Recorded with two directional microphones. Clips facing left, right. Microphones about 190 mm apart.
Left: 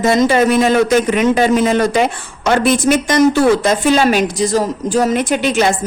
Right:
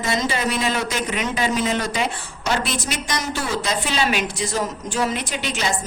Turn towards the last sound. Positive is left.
turn(degrees=55)  # may be behind; listen again after turning